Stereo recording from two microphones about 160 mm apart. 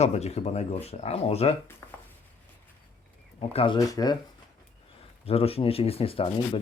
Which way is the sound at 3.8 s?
25° left (ahead or behind).